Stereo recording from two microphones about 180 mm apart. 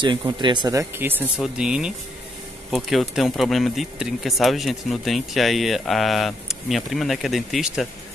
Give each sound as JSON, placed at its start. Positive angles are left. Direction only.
{"t": 0.0, "sound": "speech", "side_deg": -25}